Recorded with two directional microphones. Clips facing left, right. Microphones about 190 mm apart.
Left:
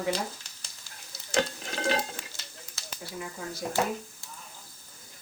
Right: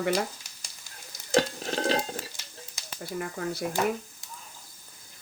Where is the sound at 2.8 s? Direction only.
15° right (ahead or behind).